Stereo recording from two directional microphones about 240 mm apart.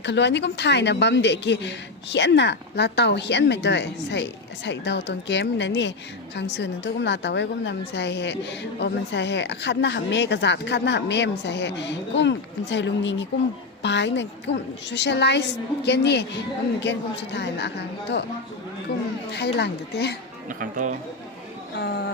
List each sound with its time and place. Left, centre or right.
0.0 s a woman's voice: left
19.3 s a woman's voice: left
20.5 s speech: right
21.8 s a woman's voice: left